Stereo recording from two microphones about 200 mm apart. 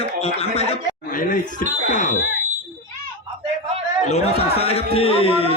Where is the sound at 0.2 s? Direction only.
30° left (ahead or behind).